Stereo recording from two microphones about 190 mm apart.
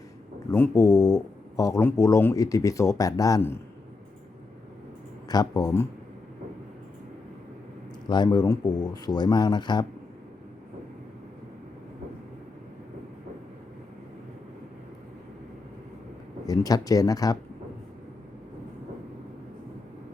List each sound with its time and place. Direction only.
0.5 s speech: 15° left (ahead or behind)
5.3 s speech: 20° left (ahead or behind)
8.1 s speech: 20° left (ahead or behind)
16.5 s speech: 20° left (ahead or behind)